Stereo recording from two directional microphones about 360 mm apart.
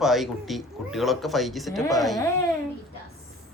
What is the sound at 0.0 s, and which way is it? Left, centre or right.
A woman's voice, centre.